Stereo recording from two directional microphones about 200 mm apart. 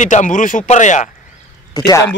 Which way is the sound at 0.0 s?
40° left (ahead or behind).